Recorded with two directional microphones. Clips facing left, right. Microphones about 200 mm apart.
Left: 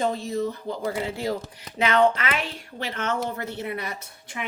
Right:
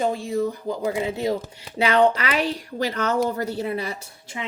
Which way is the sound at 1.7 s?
30° right (ahead or behind).